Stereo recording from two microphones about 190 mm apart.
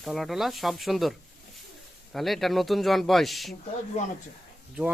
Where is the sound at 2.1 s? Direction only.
Centre (ahead or behind).